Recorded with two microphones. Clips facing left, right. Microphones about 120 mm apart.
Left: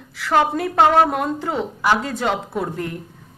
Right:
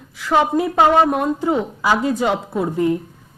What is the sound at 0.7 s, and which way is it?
Speech, centre (ahead or behind).